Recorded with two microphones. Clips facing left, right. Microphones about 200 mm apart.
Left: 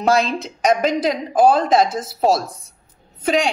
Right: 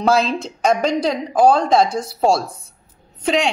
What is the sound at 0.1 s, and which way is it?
A woman's voice, centre (ahead or behind).